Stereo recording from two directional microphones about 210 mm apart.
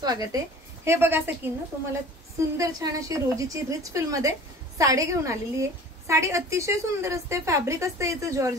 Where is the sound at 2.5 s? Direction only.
15° right (ahead or behind).